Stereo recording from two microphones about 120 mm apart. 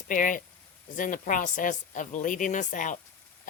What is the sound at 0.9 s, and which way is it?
Speech, 90° left.